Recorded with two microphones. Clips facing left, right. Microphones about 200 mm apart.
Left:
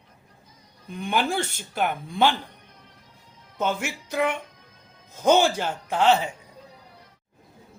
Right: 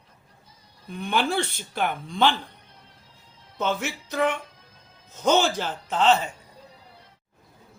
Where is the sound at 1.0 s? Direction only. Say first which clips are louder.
Even; 10° left (ahead or behind).